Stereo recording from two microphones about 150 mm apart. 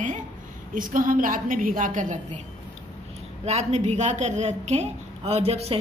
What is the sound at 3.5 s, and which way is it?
A woman's voice, 45° right (ahead or behind).